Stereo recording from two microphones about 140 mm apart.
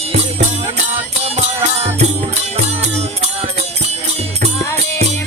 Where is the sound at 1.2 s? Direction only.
50° right (ahead or behind).